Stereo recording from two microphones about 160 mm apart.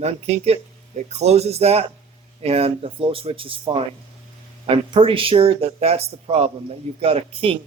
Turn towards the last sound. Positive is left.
turn(degrees=-35)  # may be behind; listen again after turning